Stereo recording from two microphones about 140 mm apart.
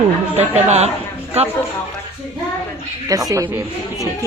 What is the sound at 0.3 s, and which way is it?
Speech, 50° right (ahead or behind).